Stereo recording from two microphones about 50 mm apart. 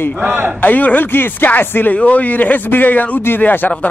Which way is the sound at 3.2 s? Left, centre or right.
Left.